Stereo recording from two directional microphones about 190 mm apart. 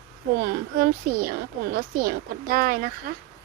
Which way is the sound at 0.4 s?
50° right (ahead or behind).